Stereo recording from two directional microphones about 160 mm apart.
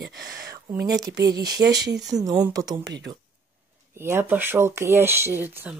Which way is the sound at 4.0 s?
15° right (ahead or behind).